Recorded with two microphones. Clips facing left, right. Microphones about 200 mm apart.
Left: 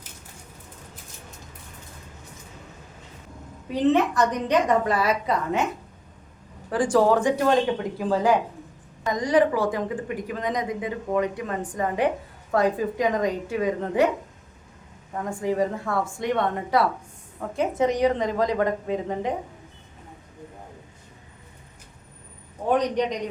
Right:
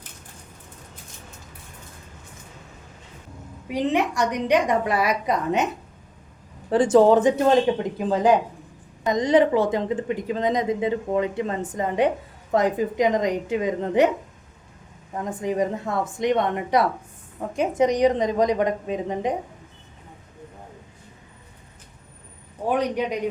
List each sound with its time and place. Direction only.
3.7 s a woman's voice: 15° right (ahead or behind)
6.7 s a woman's voice: 25° right (ahead or behind)
15.1 s a woman's voice: 20° right (ahead or behind)
22.7 s a woman's voice: 10° right (ahead or behind)